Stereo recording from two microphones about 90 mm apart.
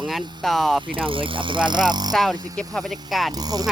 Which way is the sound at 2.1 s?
5° left (ahead or behind).